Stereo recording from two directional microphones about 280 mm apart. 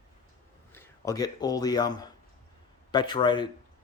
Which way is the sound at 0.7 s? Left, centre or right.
Centre.